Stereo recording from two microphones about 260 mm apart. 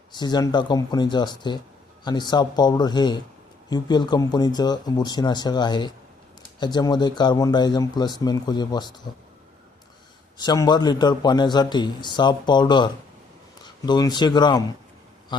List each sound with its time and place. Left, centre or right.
0.1 s a man's voice: centre
10.3 s a man's voice: centre